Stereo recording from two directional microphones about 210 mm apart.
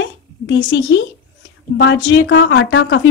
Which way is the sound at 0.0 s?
55° left (ahead or behind).